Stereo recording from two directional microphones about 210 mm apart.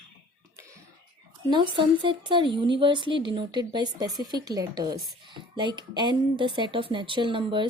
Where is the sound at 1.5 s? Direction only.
25° right (ahead or behind).